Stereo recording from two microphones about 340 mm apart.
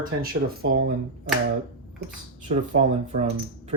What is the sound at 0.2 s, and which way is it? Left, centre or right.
Speech, right.